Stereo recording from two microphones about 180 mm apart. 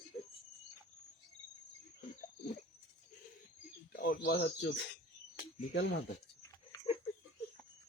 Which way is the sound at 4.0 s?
60° left (ahead or behind).